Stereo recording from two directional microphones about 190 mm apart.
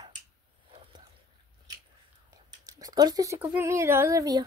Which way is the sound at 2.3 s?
20° right (ahead or behind).